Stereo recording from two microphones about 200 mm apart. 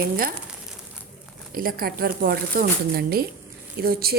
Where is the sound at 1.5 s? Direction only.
45° right (ahead or behind).